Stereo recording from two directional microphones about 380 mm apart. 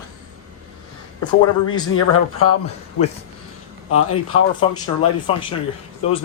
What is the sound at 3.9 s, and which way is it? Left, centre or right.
Speech, left.